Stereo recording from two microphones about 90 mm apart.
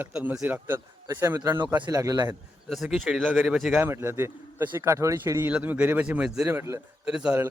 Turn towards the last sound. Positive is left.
turn(degrees=-10)  # may be behind; listen again after turning